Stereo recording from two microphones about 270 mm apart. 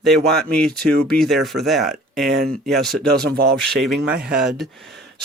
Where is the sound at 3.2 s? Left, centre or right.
Right.